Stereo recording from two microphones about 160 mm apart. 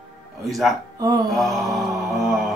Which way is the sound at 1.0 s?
20° right (ahead or behind).